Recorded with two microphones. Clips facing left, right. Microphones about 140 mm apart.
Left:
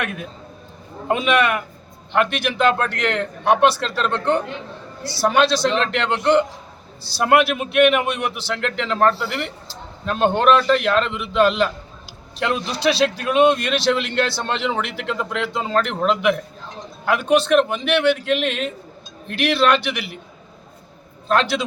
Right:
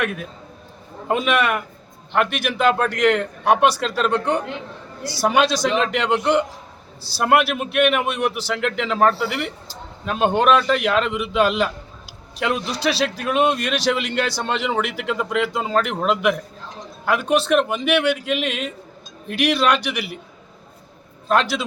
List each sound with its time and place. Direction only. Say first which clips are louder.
0.0 s a man's voice: right 2 dB; centre (ahead or behind)
21.2 s a man's voice: even; 5° right (ahead or behind)